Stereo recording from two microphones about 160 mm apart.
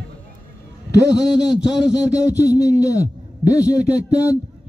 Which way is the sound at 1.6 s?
5° right (ahead or behind).